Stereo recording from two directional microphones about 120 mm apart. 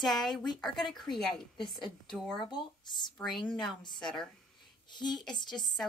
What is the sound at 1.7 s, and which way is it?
Speech, 40° left (ahead or behind).